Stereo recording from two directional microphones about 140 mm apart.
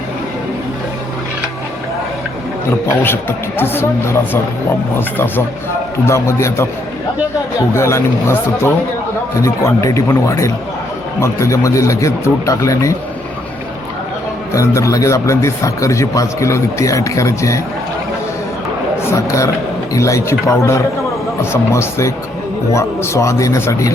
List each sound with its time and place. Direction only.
2.6 s a man's voice: 15° left (ahead or behind)
7.7 s a man's voice: 20° left (ahead or behind)
14.5 s a man's voice: 20° left (ahead or behind)
19.1 s a man's voice: 20° left (ahead or behind)